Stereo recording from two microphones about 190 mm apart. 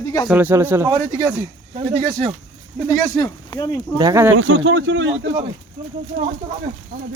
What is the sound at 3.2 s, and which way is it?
Speech, 20° left (ahead or behind).